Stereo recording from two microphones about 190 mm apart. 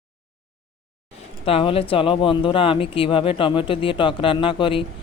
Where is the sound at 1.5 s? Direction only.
30° left (ahead or behind).